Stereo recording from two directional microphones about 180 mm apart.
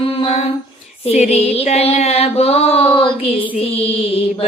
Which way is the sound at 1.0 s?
35° left (ahead or behind).